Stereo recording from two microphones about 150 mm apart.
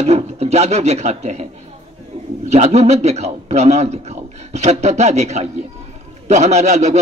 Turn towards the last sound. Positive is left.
turn(degrees=-45)  # may be behind; listen again after turning